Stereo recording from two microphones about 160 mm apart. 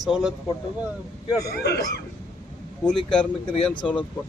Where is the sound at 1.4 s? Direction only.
85° left.